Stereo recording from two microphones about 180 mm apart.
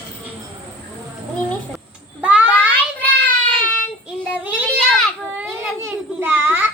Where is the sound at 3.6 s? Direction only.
50° left (ahead or behind).